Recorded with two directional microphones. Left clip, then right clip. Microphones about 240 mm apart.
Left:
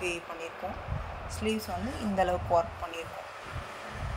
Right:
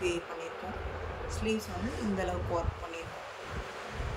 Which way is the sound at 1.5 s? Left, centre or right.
Centre.